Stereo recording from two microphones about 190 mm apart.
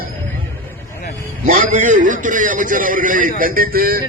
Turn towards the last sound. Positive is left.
turn(degrees=-50)  # may be behind; listen again after turning